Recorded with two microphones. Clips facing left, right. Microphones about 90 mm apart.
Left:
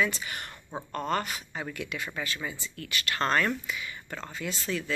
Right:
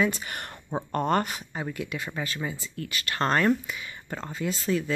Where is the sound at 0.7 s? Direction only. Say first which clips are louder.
Right 8 dB; 20° right (ahead or behind).